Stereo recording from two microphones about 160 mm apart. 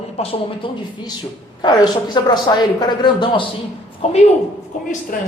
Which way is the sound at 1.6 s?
25° left (ahead or behind).